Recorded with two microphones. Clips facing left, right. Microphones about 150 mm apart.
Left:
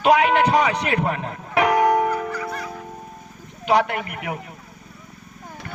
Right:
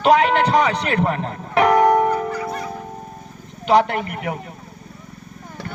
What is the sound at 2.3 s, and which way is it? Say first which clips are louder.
Music: right 3 dB; 25° right (ahead or behind).